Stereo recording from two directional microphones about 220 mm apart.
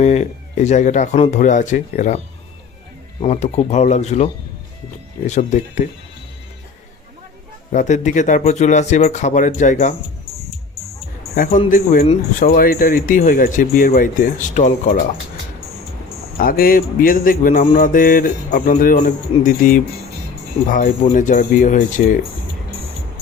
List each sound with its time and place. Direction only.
0.0 s speech: 30° left (ahead or behind)
7.7 s speech: 35° left (ahead or behind)
11.7 s speech: 40° left (ahead or behind)
16.4 s speech: 40° left (ahead or behind)